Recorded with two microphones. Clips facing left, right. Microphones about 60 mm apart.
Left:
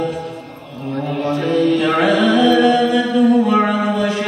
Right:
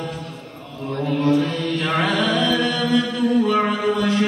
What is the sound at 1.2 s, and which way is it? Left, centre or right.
Mantra, centre.